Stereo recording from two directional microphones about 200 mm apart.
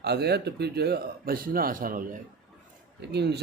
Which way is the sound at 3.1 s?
55° right (ahead or behind).